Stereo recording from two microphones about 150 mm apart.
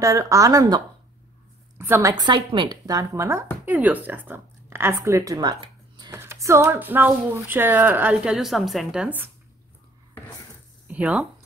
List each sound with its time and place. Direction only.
0.0 s speech: 20° right (ahead or behind)
6.1 s speech: 20° right (ahead or behind)
10.9 s speech: 5° right (ahead or behind)